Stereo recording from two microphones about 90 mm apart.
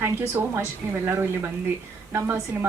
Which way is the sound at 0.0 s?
30° right (ahead or behind).